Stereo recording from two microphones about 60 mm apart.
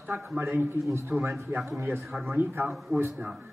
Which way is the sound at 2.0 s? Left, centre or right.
Centre.